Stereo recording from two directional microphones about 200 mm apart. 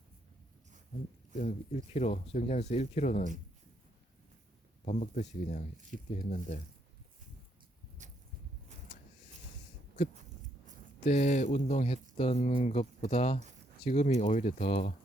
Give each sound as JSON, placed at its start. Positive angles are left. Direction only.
{"t": 1.4, "sound": "speech", "side_deg": 35}
{"t": 4.9, "sound": "speech", "side_deg": 35}
{"t": 8.0, "sound": "a sound", "side_deg": -35}
{"t": 11.0, "sound": "speech", "side_deg": 35}